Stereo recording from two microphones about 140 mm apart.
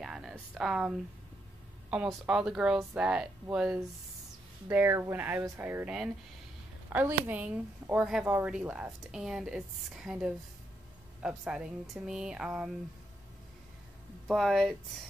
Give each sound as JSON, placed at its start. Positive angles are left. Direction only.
{"t": 0.0, "sound": "a woman's voice", "side_deg": -5}
{"t": 5.9, "sound": "a woman's voice", "side_deg": -5}
{"t": 14.2, "sound": "speech", "side_deg": 0}